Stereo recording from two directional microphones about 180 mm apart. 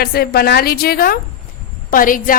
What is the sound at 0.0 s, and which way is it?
A woman's voice, 55° left (ahead or behind).